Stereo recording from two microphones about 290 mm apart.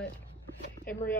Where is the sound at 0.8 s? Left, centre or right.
Centre.